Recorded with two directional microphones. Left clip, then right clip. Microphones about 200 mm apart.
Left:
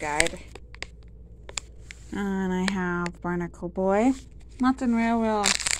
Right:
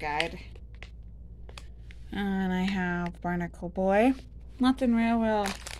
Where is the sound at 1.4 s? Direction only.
60° left (ahead or behind).